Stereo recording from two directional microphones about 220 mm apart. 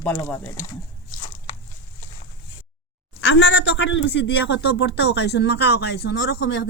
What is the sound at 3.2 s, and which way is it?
A man's voice, 55° left (ahead or behind).